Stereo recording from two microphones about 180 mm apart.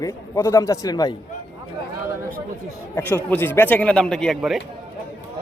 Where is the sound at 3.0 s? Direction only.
10° left (ahead or behind).